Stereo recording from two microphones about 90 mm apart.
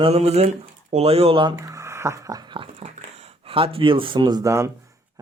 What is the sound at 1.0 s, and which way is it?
Speech, 90° right.